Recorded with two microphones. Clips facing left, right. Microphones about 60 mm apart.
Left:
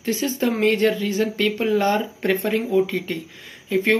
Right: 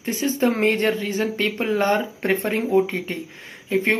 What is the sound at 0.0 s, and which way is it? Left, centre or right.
Speech, right.